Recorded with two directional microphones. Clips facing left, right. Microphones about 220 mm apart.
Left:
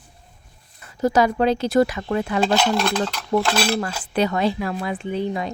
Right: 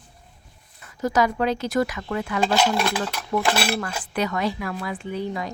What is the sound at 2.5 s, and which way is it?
Stir, 5° right (ahead or behind).